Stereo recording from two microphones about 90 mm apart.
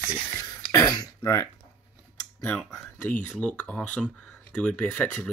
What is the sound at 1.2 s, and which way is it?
Speech, 30° left (ahead or behind).